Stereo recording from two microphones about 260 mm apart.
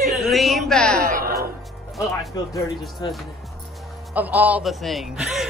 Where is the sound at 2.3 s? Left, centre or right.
Centre.